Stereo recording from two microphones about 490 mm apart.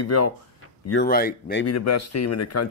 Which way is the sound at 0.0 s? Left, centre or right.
Left.